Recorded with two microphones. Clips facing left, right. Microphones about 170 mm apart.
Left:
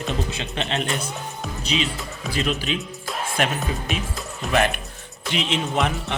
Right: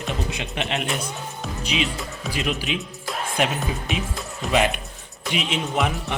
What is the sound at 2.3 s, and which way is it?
A man's voice, 10° right (ahead or behind).